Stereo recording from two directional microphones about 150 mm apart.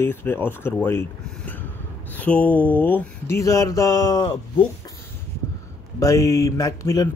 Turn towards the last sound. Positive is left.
turn(degrees=25)  # may be behind; listen again after turning